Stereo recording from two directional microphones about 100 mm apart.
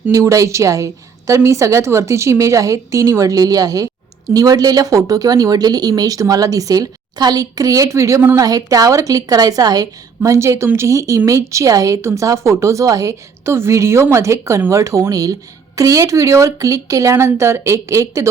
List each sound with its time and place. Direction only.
0.1 s a woman's voice: 35° right (ahead or behind)
8.4 s a woman's voice: 40° right (ahead or behind)